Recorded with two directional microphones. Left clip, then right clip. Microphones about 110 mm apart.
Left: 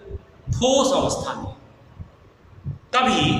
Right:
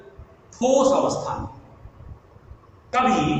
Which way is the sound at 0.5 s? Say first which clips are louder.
Even; 15° left (ahead or behind).